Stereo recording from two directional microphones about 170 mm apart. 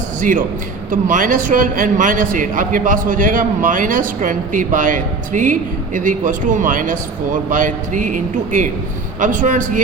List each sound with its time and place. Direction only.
0.2 s a man's voice: 50° right (ahead or behind)